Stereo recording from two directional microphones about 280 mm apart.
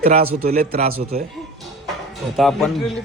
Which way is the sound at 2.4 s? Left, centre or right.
Centre.